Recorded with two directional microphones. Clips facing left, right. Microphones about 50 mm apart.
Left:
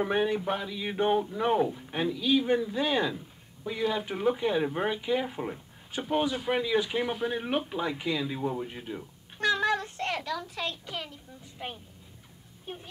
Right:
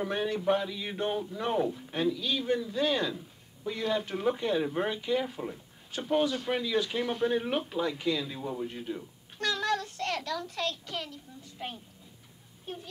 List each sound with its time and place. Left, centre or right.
0.0 s speech: centre